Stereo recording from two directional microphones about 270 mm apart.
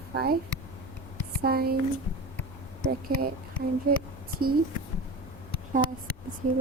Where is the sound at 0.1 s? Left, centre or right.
Right.